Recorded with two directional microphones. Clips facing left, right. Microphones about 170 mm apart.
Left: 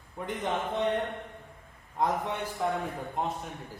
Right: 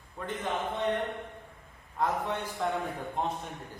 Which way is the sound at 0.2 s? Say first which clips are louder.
Left 1 dB; 15° left (ahead or behind).